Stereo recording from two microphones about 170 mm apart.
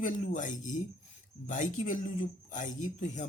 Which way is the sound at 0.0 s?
50° left (ahead or behind).